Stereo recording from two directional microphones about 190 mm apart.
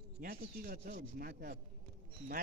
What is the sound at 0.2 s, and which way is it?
Speech, 50° right (ahead or behind).